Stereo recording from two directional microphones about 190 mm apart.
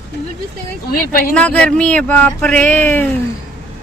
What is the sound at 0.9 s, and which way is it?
Speech, 50° left (ahead or behind).